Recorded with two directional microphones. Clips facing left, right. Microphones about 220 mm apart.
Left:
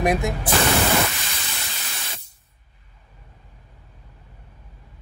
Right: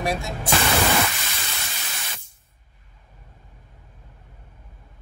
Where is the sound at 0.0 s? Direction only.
20° left (ahead or behind).